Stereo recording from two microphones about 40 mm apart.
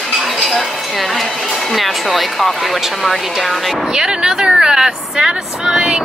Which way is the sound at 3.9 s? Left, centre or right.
Centre.